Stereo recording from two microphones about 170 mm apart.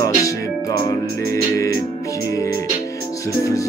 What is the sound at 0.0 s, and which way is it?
Music, 20° left (ahead or behind).